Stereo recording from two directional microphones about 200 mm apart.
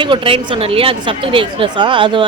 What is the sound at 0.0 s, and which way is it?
Speech, 25° right (ahead or behind).